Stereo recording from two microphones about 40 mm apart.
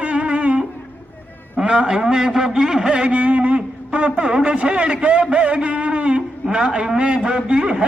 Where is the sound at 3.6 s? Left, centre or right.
Right.